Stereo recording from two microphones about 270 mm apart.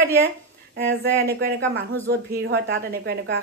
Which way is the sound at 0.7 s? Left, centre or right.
Right.